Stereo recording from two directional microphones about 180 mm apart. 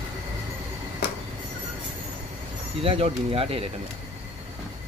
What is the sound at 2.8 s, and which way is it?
Speech, 30° right (ahead or behind).